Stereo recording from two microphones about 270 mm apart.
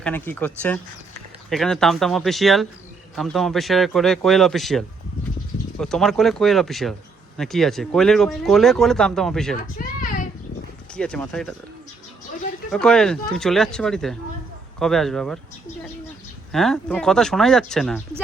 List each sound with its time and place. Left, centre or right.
0.0 s speech: centre
9.8 s a sound: left
10.9 s speech: centre
12.7 s speech: centre
16.5 s speech: centre